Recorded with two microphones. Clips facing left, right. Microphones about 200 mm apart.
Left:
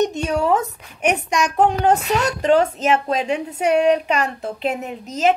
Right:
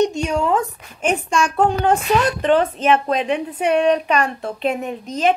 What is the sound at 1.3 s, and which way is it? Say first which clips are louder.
Speech: right 1 dB; 20° left (ahead or behind).